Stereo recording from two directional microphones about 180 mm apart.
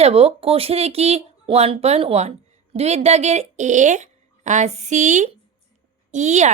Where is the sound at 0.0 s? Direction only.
35° right (ahead or behind).